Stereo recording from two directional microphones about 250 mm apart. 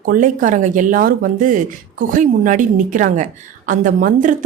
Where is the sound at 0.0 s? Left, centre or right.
Right.